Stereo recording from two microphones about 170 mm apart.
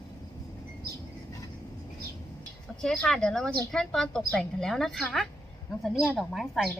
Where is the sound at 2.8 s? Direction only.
Centre (ahead or behind).